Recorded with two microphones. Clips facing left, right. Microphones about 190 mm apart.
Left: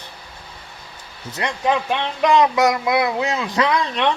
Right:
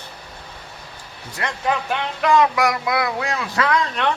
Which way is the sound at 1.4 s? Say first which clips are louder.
Left 3 dB; 20° left (ahead or behind).